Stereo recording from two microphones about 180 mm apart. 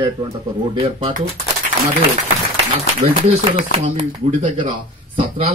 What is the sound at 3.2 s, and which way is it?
Speech, 30° right (ahead or behind).